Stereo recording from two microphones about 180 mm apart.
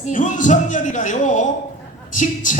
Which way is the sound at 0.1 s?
45° left (ahead or behind).